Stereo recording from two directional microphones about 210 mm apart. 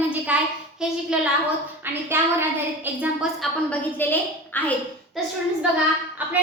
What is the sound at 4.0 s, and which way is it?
A woman's voice, 10° left (ahead or behind).